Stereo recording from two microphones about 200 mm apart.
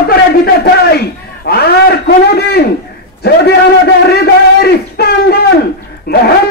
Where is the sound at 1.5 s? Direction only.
50° left (ahead or behind).